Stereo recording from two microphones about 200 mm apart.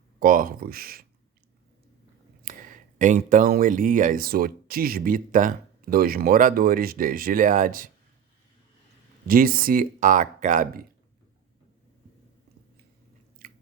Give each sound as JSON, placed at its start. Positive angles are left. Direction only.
{"t": 0.2, "sound": "speech", "side_deg": -45}
{"t": 2.4, "sound": "speech", "side_deg": -40}
{"t": 9.2, "sound": "speech", "side_deg": -45}
{"t": 13.4, "sound": "biting", "side_deg": -45}